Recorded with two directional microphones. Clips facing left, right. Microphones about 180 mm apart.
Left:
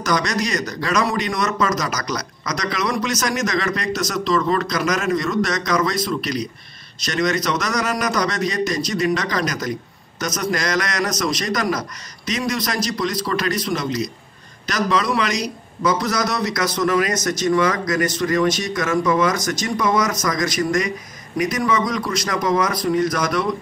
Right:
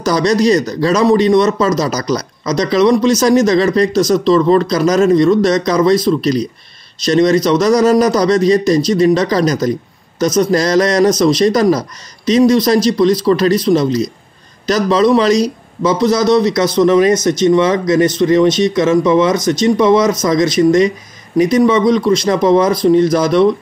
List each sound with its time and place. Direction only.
0.0 s a man's voice: 30° right (ahead or behind)